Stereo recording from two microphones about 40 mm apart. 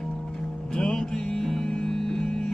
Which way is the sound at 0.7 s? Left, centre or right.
Centre.